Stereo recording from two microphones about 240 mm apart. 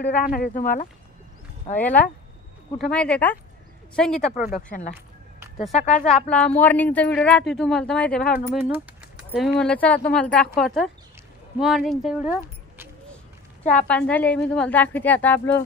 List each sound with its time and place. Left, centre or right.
0.1 s speech: left
2.8 s speech: centre
4.6 s speech: left
6.0 s speech: centre
13.7 s a woman's voice: centre